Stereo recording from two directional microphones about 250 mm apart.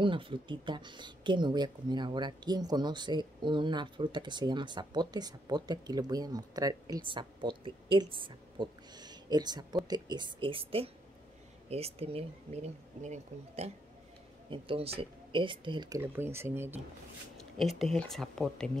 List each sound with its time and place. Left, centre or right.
0.0 s speech: centre